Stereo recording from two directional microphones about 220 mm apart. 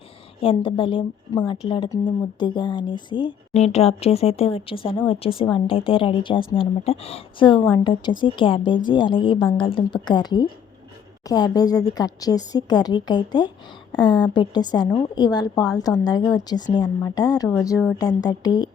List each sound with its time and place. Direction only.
0.4 s a woman's voice: 25° left (ahead or behind)